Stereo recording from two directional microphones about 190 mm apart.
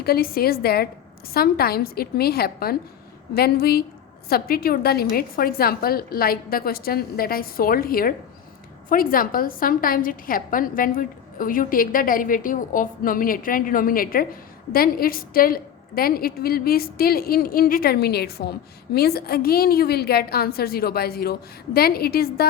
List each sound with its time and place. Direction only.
0.0 s a woman's voice: 55° left (ahead or behind)